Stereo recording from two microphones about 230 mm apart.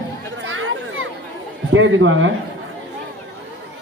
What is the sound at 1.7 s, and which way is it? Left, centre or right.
Speech, right.